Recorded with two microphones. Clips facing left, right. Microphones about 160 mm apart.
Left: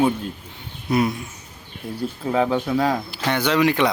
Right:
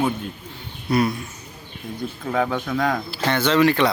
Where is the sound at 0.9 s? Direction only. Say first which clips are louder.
Even; 20° left (ahead or behind).